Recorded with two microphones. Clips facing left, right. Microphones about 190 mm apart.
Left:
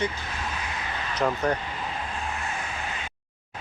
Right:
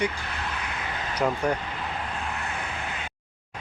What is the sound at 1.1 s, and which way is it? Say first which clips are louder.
Speech: even; 10° right (ahead or behind).